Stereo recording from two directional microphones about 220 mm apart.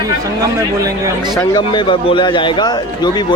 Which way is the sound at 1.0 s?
20° right (ahead or behind).